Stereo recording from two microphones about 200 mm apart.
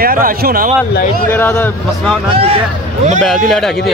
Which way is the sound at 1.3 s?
10° left (ahead or behind).